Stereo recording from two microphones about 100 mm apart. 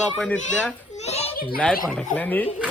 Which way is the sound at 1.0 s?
90° left.